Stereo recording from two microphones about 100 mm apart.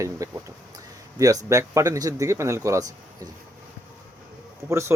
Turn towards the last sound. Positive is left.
turn(degrees=-30)  # may be behind; listen again after turning